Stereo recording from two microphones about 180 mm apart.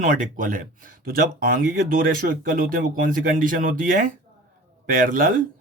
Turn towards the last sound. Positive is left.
turn(degrees=-50)  # may be behind; listen again after turning